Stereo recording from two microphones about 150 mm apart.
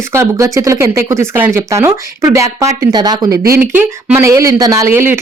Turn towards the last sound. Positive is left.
turn(degrees=-15)  # may be behind; listen again after turning